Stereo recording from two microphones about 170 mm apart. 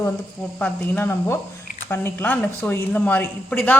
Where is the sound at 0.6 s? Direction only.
10° left (ahead or behind).